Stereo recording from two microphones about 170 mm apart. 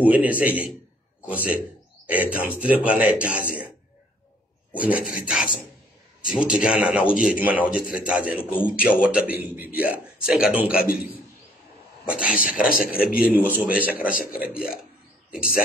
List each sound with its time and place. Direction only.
0.0 s a man's voice: 10° right (ahead or behind)
4.7 s a man's voice: 10° right (ahead or behind)
8.4 s a man's voice: 10° left (ahead or behind)
8.8 s a man's voice: 5° right (ahead or behind)
12.1 s speech: 5° right (ahead or behind)
12.5 s a man's voice: 55° left (ahead or behind)
13.1 s a man's voice: 10° right (ahead or behind)
13.9 s a man's voice: 55° left (ahead or behind)